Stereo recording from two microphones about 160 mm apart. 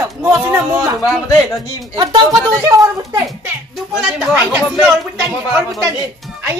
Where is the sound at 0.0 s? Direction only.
15° right (ahead or behind).